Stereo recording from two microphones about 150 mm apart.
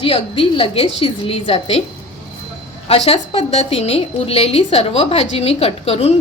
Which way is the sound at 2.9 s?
40° left (ahead or behind).